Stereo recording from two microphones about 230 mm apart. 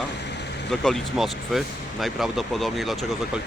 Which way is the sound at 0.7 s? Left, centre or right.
Centre.